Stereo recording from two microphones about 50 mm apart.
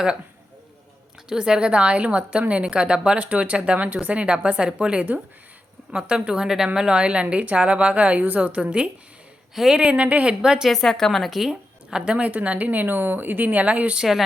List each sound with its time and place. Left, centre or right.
1.3 s a woman's voice: centre
9.6 s speech: centre
9.8 s a woman's voice: right
10.6 s a woman's voice: centre; by 14.0 s right